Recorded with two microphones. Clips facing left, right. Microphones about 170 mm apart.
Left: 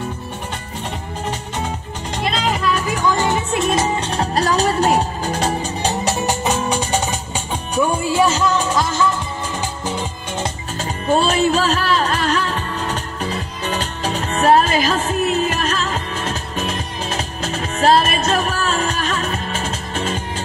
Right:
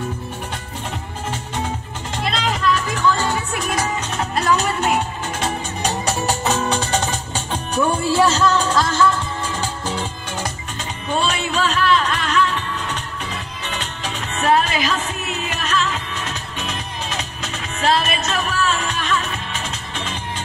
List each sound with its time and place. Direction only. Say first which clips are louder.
2.3 s music: even; 5° left (ahead or behind)
10.8 s music: left 5 dB; 40° left (ahead or behind)